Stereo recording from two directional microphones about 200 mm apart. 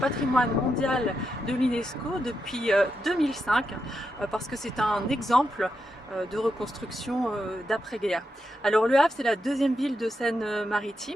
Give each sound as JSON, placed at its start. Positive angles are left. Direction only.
{"t": 0.0, "sound": "speech", "side_deg": 5}